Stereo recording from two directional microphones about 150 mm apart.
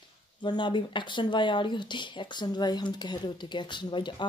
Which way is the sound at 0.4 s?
30° left (ahead or behind).